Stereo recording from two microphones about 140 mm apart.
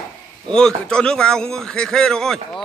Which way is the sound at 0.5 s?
5° left (ahead or behind).